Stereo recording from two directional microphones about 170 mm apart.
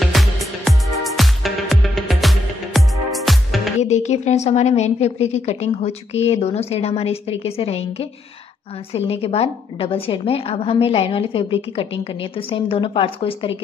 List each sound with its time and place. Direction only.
0.0 s music: centre (ahead or behind)
3.8 s a woman's voice: 40° left (ahead or behind)